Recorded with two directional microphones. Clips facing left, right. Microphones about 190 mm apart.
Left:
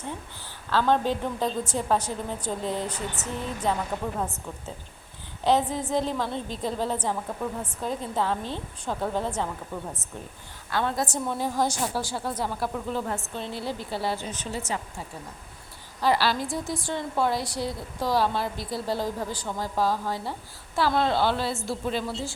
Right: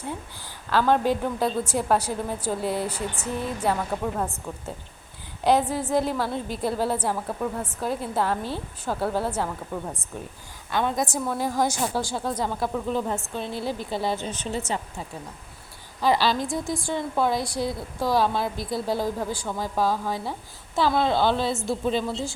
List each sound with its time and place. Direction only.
0.7 s a woman's voice: 10° right (ahead or behind)
10.7 s a woman's voice: 15° right (ahead or behind)
16.0 s a woman's voice: 15° right (ahead or behind)